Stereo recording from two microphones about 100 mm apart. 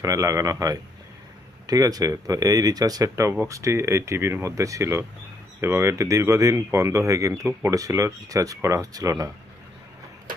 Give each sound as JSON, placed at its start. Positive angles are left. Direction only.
{"t": 0.0, "sound": "speech", "side_deg": -30}